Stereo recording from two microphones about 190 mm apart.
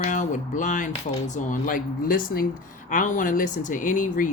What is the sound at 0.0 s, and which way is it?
Speech, 40° left (ahead or behind).